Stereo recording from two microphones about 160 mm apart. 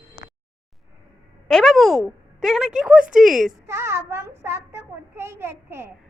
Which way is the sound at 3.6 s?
15° right (ahead or behind).